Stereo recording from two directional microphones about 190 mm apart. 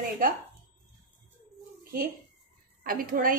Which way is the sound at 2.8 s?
50° right (ahead or behind).